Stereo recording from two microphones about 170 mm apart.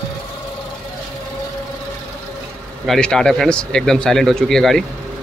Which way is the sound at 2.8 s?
Centre (ahead or behind).